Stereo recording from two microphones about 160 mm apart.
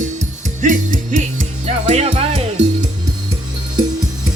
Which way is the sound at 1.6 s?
40° right (ahead or behind).